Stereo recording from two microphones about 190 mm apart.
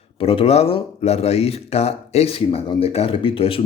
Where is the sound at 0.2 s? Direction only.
30° left (ahead or behind).